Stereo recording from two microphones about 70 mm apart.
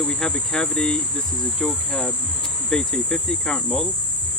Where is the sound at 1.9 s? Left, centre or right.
Left.